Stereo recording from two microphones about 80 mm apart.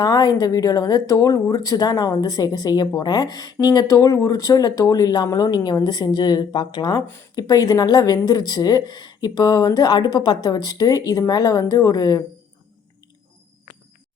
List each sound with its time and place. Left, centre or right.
0.0 s speech: left
7.3 s speech: left